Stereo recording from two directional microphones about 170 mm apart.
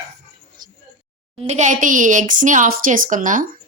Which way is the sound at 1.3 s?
40° right (ahead or behind).